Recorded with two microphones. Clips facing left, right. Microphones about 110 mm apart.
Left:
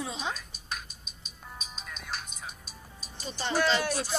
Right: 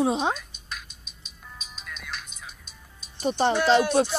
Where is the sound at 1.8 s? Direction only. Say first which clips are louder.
Right 1 dB; 35° left (ahead or behind).